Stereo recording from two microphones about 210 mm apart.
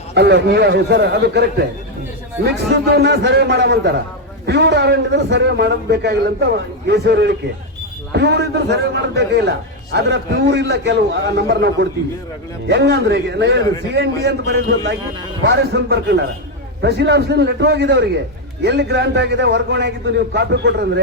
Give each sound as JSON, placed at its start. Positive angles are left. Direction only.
{"t": 0.1, "sound": "a man's voice", "side_deg": -55}